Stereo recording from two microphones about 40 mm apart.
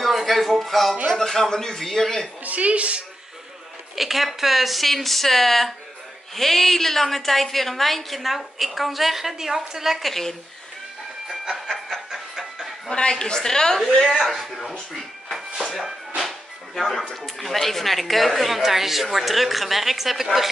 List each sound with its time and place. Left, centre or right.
0.0 s music: centre
1.1 s a man's voice: centre
2.4 s a woman's voice: right
3.9 s a woman's voice: centre
10.0 s a woman's voice: centre
11.2 s train: centre
12.1 s a sound: centre
13.1 s a man's voice: centre
13.7 s a woman's voice: centre
16.2 s music: centre
17.1 s a woman's voice: centre